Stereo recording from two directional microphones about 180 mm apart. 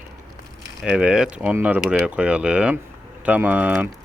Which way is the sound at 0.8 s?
5° right (ahead or behind).